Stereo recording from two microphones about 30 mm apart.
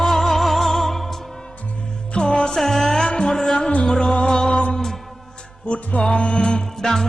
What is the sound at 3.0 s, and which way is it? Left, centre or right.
Music, left.